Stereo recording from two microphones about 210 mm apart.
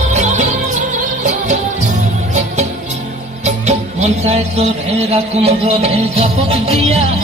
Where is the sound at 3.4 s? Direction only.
30° right (ahead or behind).